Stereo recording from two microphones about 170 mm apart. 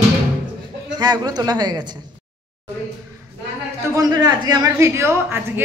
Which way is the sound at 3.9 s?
20° right (ahead or behind).